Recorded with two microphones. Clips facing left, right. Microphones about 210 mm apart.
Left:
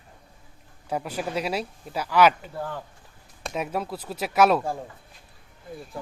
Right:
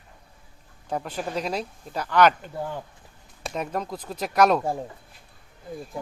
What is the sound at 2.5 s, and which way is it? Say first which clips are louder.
Speech: right 1 dB; 15° right (ahead or behind).